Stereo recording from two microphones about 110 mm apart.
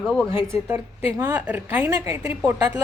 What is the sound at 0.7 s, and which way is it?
A woman's voice, 15° right (ahead or behind).